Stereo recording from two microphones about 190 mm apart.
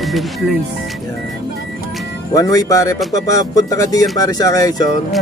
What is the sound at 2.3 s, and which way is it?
Speech, 20° left (ahead or behind).